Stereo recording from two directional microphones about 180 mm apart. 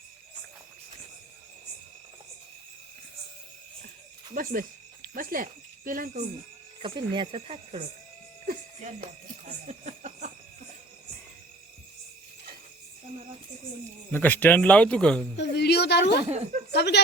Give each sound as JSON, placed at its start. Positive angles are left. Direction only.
{"t": 4.4, "sound": "speech", "side_deg": -50}
{"t": 5.1, "sound": "insect", "side_deg": -50}
{"t": 6.8, "sound": "speech", "side_deg": -25}
{"t": 8.4, "sound": "speech", "side_deg": -50}
{"t": 9.5, "sound": "a sound", "side_deg": -40}
{"t": 14.1, "sound": "speech", "side_deg": 10}
{"t": 15.4, "sound": "a woman's voice", "side_deg": 70}
{"t": 16.3, "sound": "speech", "side_deg": -40}
{"t": 16.7, "sound": "a woman's voice", "side_deg": 70}